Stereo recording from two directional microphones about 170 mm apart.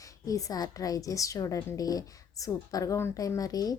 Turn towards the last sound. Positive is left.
turn(degrees=20)  # may be behind; listen again after turning